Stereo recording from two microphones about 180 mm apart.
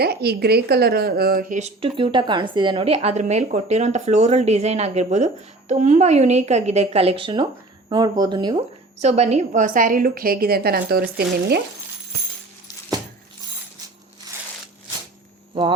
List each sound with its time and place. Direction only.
0.0 s a woman's voice: 60° right (ahead or behind); by 8.6 s 25° right (ahead or behind)
9.0 s a woman's voice: 35° right (ahead or behind); by 11.1 s 55° right (ahead or behind)